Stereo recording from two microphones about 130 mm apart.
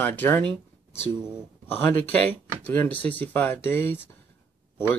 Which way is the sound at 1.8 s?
15° left (ahead or behind).